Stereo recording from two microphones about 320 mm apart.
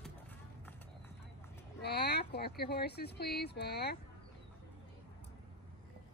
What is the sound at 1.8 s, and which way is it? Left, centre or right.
Speech, left.